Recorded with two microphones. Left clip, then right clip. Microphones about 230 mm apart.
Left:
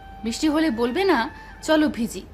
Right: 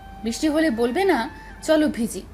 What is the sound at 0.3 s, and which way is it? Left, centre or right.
A woman's voice, centre.